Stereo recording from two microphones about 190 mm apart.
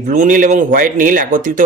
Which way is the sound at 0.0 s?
45° right (ahead or behind).